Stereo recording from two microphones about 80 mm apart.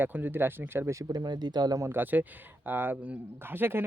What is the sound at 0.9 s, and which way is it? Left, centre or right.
Speech, right.